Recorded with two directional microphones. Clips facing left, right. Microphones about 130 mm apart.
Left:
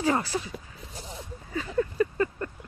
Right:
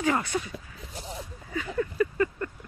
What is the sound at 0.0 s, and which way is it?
Speech, 30° left (ahead or behind).